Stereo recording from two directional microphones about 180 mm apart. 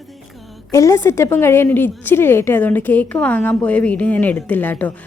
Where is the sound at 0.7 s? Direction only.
15° left (ahead or behind).